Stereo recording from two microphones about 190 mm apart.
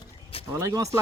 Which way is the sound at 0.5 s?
15° right (ahead or behind).